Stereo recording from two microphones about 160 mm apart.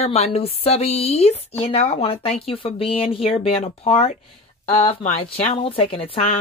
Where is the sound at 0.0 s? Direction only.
40° left (ahead or behind).